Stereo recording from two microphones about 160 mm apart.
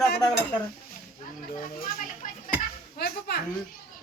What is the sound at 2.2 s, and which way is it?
Children playing, 55° left (ahead or behind).